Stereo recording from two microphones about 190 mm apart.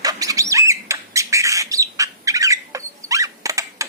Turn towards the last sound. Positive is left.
turn(degrees=-15)  # may be behind; listen again after turning